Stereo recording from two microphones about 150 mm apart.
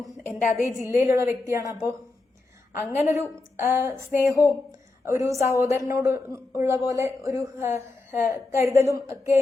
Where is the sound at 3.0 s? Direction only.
20° right (ahead or behind).